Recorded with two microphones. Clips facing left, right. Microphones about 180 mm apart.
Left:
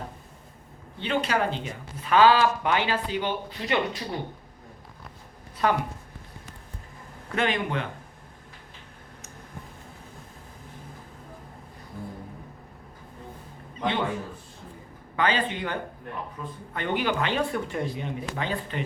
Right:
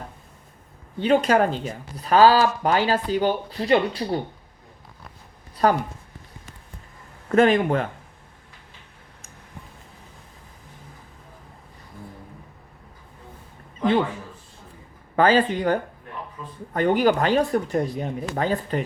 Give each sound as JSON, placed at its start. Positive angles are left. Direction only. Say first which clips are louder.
{"t": 0.9, "sound": "speech", "louder": "right 8 dB", "side_deg": -45}
{"t": 5.6, "sound": "speech", "louder": "right 5 dB", "side_deg": -40}
{"t": 7.3, "sound": "speech", "louder": "right 10 dB", "side_deg": -45}
{"t": 15.1, "sound": "speech", "louder": "right 8 dB", "side_deg": -40}